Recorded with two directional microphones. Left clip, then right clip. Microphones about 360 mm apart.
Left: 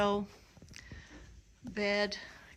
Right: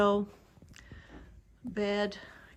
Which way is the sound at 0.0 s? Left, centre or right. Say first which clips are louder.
Right 4 dB; centre.